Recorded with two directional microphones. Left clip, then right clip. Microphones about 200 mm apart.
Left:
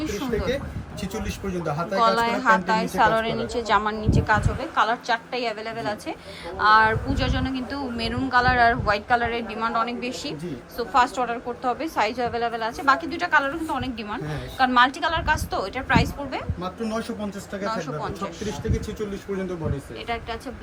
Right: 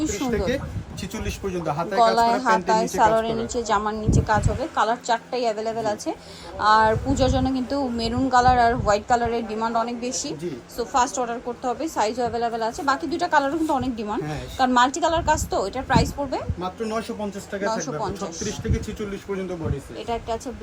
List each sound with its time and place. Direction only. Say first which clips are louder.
0.2 s a woman's voice: right 2 dB; centre (ahead or behind)
2.0 s a woman's voice: right 3 dB; 20° right (ahead or behind)
16.6 s speech: right 1 dB; centre (ahead or behind)